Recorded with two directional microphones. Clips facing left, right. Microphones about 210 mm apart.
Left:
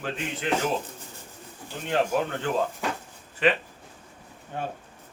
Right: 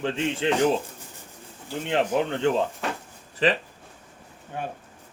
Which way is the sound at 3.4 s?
35° right (ahead or behind).